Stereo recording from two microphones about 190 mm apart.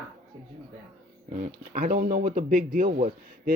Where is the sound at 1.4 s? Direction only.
45° right (ahead or behind).